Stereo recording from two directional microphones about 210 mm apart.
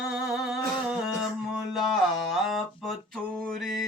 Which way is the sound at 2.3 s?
Centre (ahead or behind).